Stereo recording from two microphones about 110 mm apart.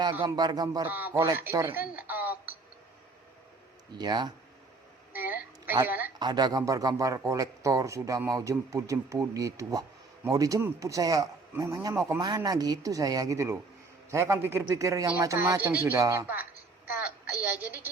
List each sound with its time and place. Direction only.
0.1 s speech: 20° right (ahead or behind)
0.3 s a man's voice: 40° right (ahead or behind)
0.8 s speech: 15° right (ahead or behind)
1.5 s a sound: 20° right (ahead or behind)
3.9 s a man's voice: 40° right (ahead or behind)
5.1 s a sound: 15° right (ahead or behind)
6.1 s a man's voice: 40° right (ahead or behind)
15.4 s speech: 20° right (ahead or behind)
16.2 s a woman's voice: 15° right (ahead or behind)